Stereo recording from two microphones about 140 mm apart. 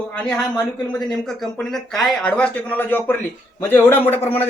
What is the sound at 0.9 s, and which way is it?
A man's voice, centre (ahead or behind).